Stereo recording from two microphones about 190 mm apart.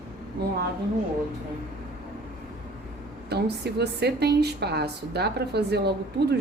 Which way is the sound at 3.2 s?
60° right (ahead or behind).